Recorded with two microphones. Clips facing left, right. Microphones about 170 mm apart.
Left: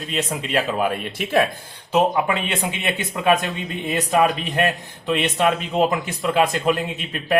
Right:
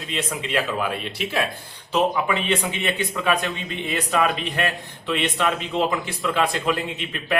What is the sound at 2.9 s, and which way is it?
A man's voice, 50° left (ahead or behind).